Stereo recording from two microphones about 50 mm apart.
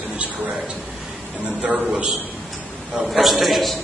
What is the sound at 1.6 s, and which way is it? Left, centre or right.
Speech, right.